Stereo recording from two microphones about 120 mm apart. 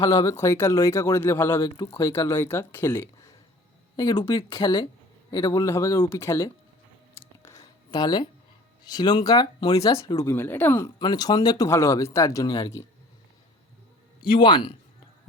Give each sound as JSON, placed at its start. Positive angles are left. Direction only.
{"t": 0.0, "sound": "speech", "side_deg": 25}
{"t": 4.1, "sound": "a man's voice", "side_deg": 50}
{"t": 4.5, "sound": "speech", "side_deg": 40}
{"t": 7.4, "sound": "a sound", "side_deg": 30}
{"t": 8.8, "sound": "speech", "side_deg": 35}
{"t": 10.0, "sound": "speech", "side_deg": 25}
{"t": 10.8, "sound": "speech", "side_deg": 35}
{"t": 14.2, "sound": "a man's voice", "side_deg": 45}